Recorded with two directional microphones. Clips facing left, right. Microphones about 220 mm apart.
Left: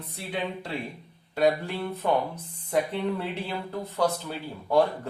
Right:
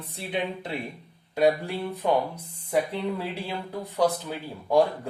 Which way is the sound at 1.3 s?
15° right (ahead or behind).